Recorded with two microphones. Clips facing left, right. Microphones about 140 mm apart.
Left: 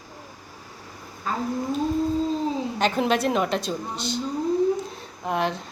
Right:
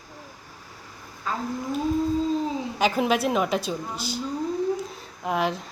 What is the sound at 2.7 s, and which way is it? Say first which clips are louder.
A woman's voice: right 1 dB; 5° right (ahead or behind).